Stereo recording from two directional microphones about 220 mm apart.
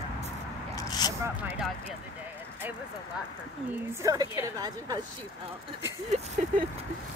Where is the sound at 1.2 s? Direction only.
10° right (ahead or behind).